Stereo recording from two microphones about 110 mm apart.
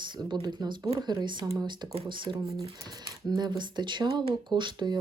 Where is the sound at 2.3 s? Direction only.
30° right (ahead or behind).